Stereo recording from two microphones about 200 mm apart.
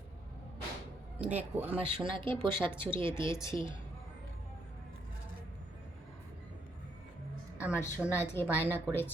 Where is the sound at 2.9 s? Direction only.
25° right (ahead or behind).